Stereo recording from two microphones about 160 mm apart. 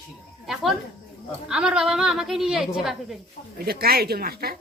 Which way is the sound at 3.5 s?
70° right (ahead or behind).